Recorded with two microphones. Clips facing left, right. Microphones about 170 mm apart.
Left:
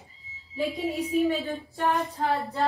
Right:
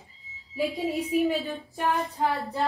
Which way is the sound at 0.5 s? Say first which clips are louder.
Right 1 dB; centre (ahead or behind).